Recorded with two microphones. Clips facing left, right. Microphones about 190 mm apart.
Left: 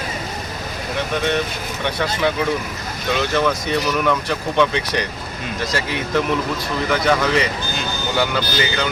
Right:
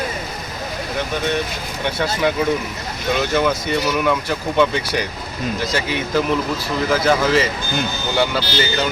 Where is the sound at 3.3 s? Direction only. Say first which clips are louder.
Even; 5° right (ahead or behind).